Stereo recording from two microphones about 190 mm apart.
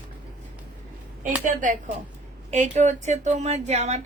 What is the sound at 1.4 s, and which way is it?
A woman's voice, 45° right (ahead or behind).